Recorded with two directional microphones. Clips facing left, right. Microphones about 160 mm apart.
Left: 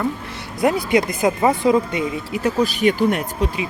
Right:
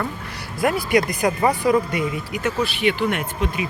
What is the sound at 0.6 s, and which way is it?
Speech, 20° left (ahead or behind).